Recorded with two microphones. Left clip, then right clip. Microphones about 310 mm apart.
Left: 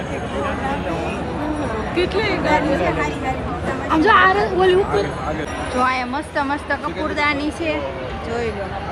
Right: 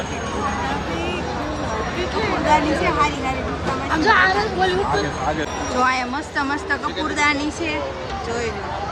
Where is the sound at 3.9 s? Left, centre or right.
Centre.